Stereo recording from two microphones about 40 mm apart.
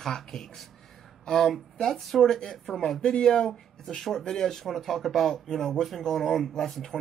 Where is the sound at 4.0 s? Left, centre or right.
Centre.